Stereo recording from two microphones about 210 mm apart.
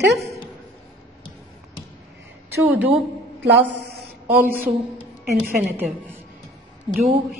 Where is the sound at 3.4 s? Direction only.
55° right (ahead or behind).